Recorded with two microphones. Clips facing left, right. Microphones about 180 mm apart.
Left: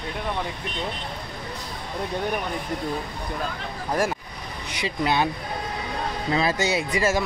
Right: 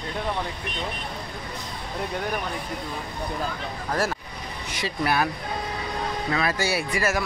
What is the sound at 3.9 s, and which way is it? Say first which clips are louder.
Speech: left 2 dB; 15° left (ahead or behind).